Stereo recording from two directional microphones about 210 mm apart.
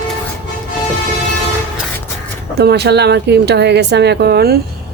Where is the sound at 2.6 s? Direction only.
50° right (ahead or behind).